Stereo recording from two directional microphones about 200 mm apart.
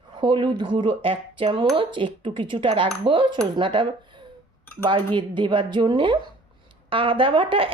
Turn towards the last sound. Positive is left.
turn(degrees=-25)  # may be behind; listen again after turning